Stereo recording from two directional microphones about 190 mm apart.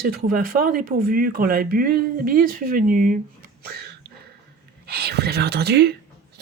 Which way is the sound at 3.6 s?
55° right (ahead or behind).